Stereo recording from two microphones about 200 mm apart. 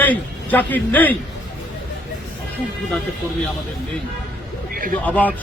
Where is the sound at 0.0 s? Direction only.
10° left (ahead or behind).